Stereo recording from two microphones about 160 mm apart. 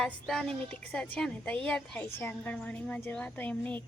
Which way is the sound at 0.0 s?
5° left (ahead or behind).